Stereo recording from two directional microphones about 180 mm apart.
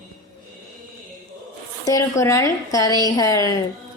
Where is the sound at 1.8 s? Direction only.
15° left (ahead or behind).